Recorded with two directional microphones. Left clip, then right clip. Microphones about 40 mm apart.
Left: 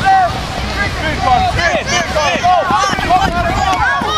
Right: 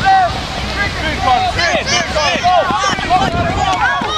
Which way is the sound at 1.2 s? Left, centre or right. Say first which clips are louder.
Left 1 dB; left.